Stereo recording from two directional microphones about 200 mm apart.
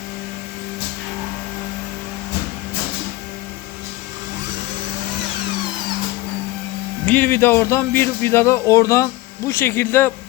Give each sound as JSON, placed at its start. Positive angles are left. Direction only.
{"t": 7.0, "sound": "speech", "side_deg": 10}